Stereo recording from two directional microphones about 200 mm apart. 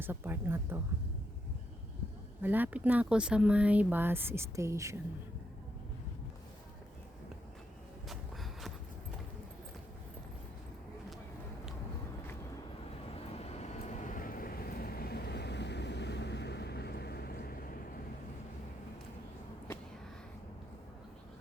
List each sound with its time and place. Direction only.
0.0 s speech: 10° right (ahead or behind)
2.4 s speech: 10° right (ahead or behind)
8.0 s a sound: centre (ahead or behind)
13.1 s vehicle: 30° left (ahead or behind); by 17.7 s 45° left (ahead or behind)